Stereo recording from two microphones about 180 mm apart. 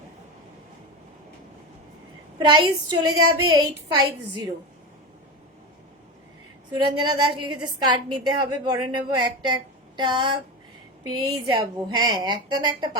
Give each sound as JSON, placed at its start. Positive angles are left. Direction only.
{"t": 2.4, "sound": "a woman's voice", "side_deg": -25}
{"t": 6.7, "sound": "a woman's voice", "side_deg": -25}